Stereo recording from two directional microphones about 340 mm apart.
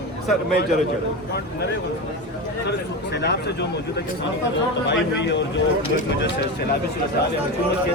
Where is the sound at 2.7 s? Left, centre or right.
Left.